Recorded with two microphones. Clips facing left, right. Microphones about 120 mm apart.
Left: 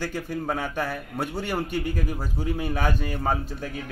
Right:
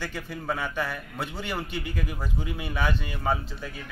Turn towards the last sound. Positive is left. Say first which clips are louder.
# left 2 dB
turn(degrees=45)  # may be behind; listen again after turning